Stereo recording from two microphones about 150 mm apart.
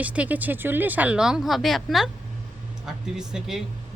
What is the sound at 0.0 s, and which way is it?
A woman's voice, 10° right (ahead or behind).